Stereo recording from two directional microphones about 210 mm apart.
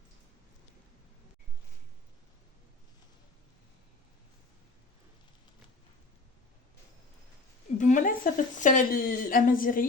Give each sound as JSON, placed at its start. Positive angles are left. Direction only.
{"t": 7.8, "sound": "a woman's voice", "side_deg": 35}